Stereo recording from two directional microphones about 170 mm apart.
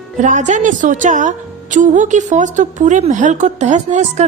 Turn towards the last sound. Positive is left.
turn(degrees=-45)  # may be behind; listen again after turning